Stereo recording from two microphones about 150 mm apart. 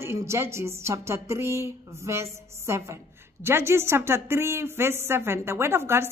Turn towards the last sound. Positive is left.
turn(degrees=-15)  # may be behind; listen again after turning